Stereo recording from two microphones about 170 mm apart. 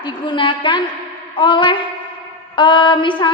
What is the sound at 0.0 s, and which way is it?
A woman's voice, 30° left (ahead or behind).